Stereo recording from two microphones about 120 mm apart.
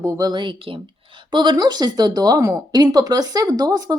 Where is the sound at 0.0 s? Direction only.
30° right (ahead or behind).